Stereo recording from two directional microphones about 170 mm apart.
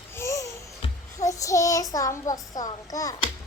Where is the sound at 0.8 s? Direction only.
35° left (ahead or behind).